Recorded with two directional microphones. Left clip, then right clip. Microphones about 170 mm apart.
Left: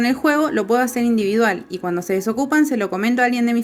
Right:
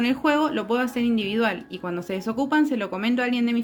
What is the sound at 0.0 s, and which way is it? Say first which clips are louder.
A woman's voice: left 4 dB; 35° left (ahead or behind).